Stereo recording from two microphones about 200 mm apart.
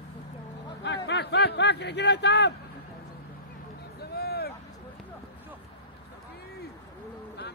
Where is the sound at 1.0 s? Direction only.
60° left (ahead or behind).